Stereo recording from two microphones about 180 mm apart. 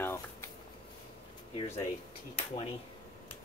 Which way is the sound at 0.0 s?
15° left (ahead or behind).